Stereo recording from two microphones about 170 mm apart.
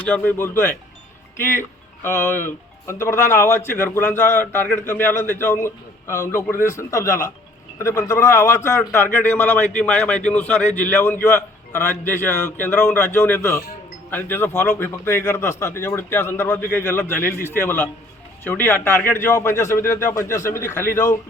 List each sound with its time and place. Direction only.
0.0 s a man's voice: 10° left (ahead or behind)